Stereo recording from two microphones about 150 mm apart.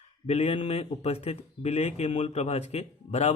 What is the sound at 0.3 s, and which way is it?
A man's voice, 45° left (ahead or behind).